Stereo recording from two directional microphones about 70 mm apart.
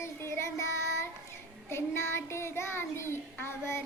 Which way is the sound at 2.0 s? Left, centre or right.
Left.